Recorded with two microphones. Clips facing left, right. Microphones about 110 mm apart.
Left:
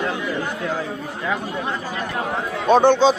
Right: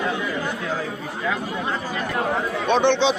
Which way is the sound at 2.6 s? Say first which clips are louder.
Left 5 dB; 40° left (ahead or behind).